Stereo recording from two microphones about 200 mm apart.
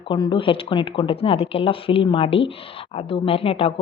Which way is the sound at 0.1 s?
25° left (ahead or behind).